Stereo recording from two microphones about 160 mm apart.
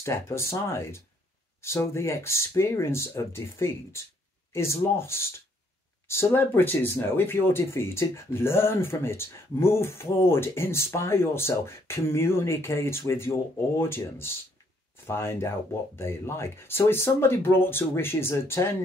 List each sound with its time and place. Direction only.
0.0 s speech: 15° left (ahead or behind)